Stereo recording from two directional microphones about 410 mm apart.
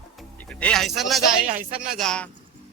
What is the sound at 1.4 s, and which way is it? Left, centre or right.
Speech, centre.